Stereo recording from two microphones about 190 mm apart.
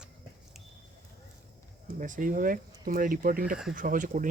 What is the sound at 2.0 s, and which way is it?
Speech, 45° right (ahead or behind).